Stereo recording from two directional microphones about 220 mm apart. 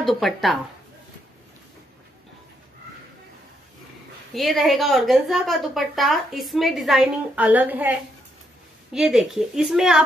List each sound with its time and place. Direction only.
0.0 s a woman's voice: centre (ahead or behind)
4.4 s a woman's voice: centre (ahead or behind)